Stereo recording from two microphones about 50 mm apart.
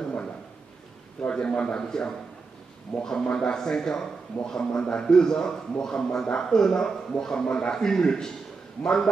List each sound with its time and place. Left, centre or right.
1.3 s a man's voice: centre